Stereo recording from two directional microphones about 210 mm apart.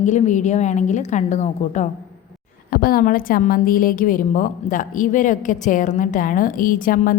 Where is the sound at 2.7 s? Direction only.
45° left (ahead or behind).